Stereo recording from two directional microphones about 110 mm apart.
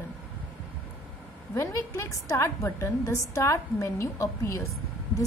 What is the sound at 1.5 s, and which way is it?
A woman's voice, 25° left (ahead or behind).